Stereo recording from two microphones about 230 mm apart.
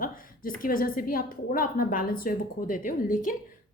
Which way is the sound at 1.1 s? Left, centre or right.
Left.